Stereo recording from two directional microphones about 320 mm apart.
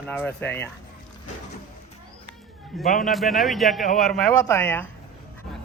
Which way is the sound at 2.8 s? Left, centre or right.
Left.